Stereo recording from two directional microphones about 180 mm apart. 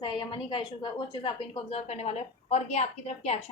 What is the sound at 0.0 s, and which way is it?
A woman's voice, 30° left (ahead or behind).